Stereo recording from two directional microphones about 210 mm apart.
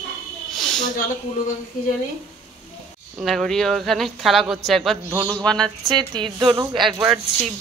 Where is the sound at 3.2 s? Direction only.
Centre (ahead or behind).